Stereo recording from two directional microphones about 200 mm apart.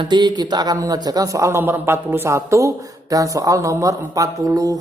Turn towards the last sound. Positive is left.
turn(degrees=-15)  # may be behind; listen again after turning